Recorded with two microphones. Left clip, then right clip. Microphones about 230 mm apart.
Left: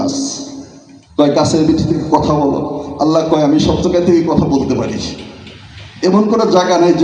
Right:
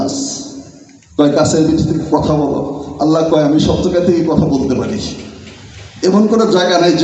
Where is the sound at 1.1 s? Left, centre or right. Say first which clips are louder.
Even; left.